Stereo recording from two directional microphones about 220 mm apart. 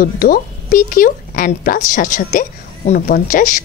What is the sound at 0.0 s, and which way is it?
A woman's voice, 40° left (ahead or behind).